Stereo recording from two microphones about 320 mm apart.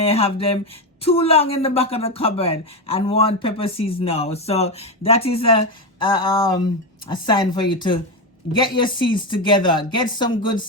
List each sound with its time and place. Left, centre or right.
0.0 s speech: centre